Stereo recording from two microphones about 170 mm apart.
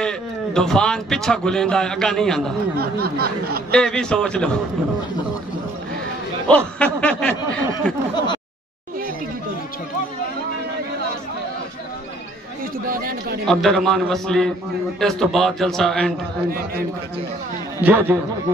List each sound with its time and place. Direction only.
0.0 s speech: 5° left (ahead or behind)
2.8 s a sound: 65° right (ahead or behind)
3.7 s a man's voice: 5° left (ahead or behind)
6.4 s snicker: 5° left (ahead or behind)
12.8 s chatter: 55° right (ahead or behind)
13.5 s a man's voice: centre (ahead or behind)
16.4 s a sound: 60° right (ahead or behind)
17.8 s a man's voice: 10° right (ahead or behind)